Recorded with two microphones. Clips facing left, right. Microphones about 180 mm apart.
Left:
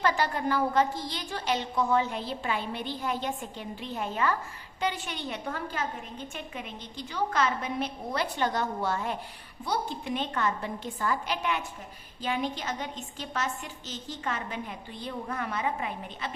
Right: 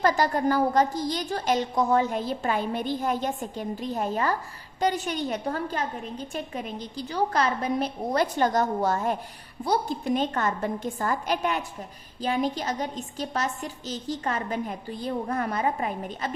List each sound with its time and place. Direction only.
0.0 s a woman's voice: 40° right (ahead or behind)